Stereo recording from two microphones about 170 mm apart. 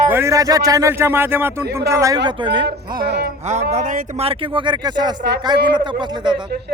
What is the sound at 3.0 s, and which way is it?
Speech, 70° right (ahead or behind).